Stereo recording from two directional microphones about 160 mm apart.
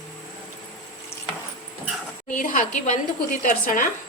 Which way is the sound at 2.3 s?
55° left (ahead or behind).